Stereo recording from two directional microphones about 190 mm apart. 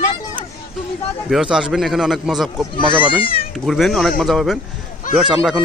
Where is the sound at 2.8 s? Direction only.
25° right (ahead or behind).